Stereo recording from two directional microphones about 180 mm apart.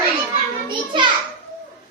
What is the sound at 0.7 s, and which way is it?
Speech, 25° right (ahead or behind).